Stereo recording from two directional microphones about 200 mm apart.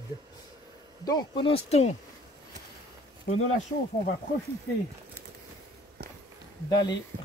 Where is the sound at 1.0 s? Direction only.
20° left (ahead or behind).